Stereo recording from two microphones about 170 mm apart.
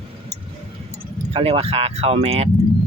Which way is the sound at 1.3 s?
35° right (ahead or behind).